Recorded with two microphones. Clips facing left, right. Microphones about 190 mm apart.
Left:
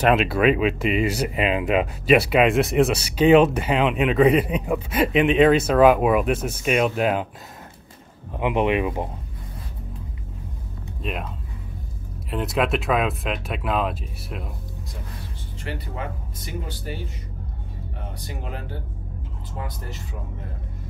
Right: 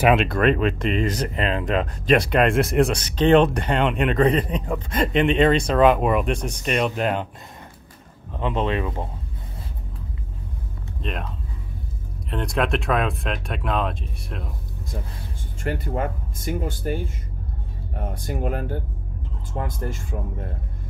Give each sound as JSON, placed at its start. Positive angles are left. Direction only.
{"t": 0.0, "sound": "speech", "side_deg": 0}
{"t": 8.3, "sound": "speech", "side_deg": 15}
{"t": 11.0, "sound": "speech", "side_deg": 5}
{"t": 12.3, "sound": "speech", "side_deg": 5}
{"t": 15.6, "sound": "speech", "side_deg": -50}
{"t": 18.1, "sound": "speech", "side_deg": -50}